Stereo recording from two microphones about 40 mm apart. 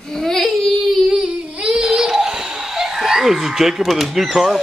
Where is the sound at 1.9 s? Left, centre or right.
Centre.